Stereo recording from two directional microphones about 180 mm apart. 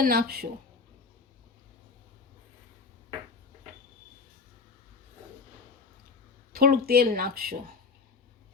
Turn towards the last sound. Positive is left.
turn(degrees=-55)  # may be behind; listen again after turning